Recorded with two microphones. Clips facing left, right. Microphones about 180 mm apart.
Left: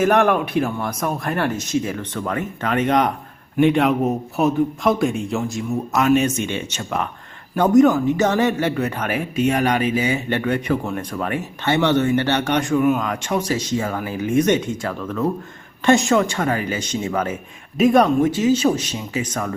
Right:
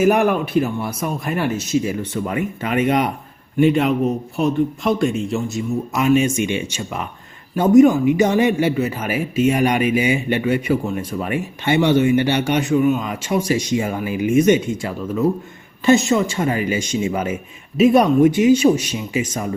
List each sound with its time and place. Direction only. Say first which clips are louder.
0.0 s speech: right 1 dB; 10° right (ahead or behind)
6.2 s speech: right 2 dB; 10° right (ahead or behind)
12.8 s speech: even; 55° left (ahead or behind)
13.1 s speech: right 2 dB; 10° right (ahead or behind)